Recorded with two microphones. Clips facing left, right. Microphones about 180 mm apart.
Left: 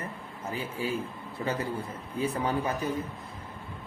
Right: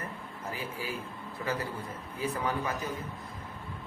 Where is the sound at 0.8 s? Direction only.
25° left (ahead or behind).